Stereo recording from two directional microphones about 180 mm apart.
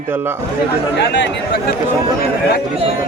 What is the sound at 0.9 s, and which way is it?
Speech, 75° left (ahead or behind).